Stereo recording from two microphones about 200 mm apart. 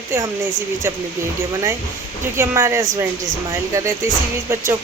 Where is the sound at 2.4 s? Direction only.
15° right (ahead or behind).